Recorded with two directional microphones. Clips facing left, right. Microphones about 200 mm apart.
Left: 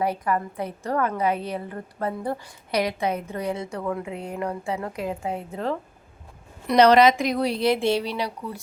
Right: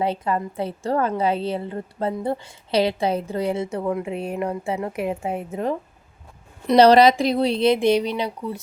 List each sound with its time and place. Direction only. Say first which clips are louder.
0.0 s a woman's voice: right 1 dB; 25° right (ahead or behind)
6.7 s a woman's voice: right 3 dB; 30° right (ahead or behind)